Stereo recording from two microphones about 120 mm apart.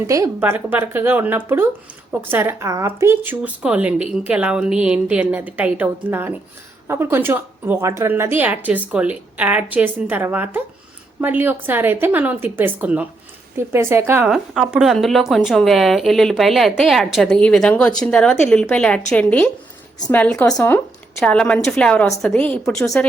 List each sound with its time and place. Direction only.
0.3 s a woman's voice: 15° right (ahead or behind)
14.3 s a woman's voice: 5° right (ahead or behind); by 20.8 s 20° left (ahead or behind)
21.2 s a woman's voice: 5° left (ahead or behind)